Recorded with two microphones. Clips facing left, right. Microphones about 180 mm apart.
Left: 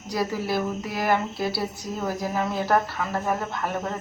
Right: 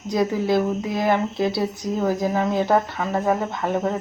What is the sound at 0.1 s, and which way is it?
Speech, 20° right (ahead or behind).